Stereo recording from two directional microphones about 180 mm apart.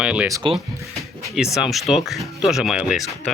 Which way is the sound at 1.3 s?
5° right (ahead or behind).